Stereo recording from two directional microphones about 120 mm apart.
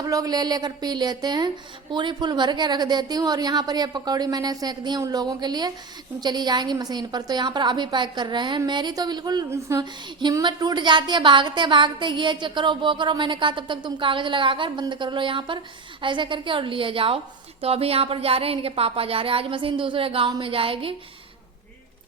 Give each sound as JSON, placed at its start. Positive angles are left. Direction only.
{"t": 0.0, "sound": "speech", "side_deg": -30}
{"t": 9.5, "sound": "a woman's voice", "side_deg": -25}
{"t": 9.8, "sound": "speech", "side_deg": -40}